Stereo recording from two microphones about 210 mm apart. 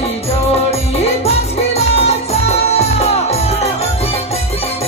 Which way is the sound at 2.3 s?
30° left (ahead or behind).